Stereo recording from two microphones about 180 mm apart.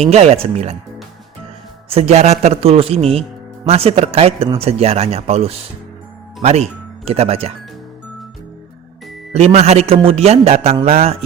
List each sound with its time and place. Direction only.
0.0 s speech: 35° right (ahead or behind)
1.9 s speech: 35° right (ahead or behind)
9.3 s speech: 35° right (ahead or behind)